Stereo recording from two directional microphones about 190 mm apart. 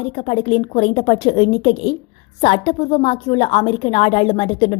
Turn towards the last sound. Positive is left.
turn(degrees=30)  # may be behind; listen again after turning